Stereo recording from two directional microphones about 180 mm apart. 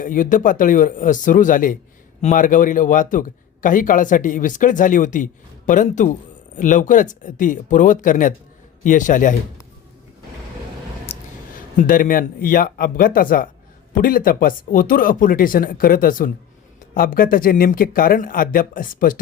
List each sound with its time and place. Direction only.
0.0 s a man's voice: 45° left (ahead or behind)
11.8 s a man's voice: 50° left (ahead or behind)